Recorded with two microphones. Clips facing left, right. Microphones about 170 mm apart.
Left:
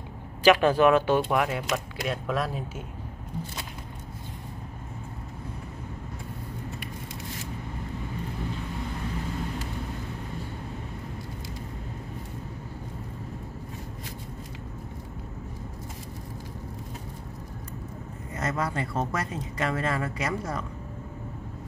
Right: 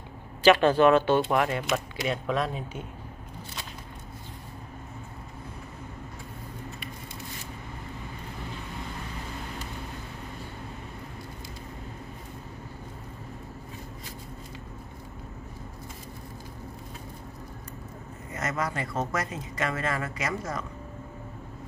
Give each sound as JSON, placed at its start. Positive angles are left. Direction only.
{"t": 0.4, "sound": "speech", "side_deg": 10}
{"t": 18.3, "sound": "a sound", "side_deg": 30}
{"t": 19.1, "sound": "a woman's voice", "side_deg": 30}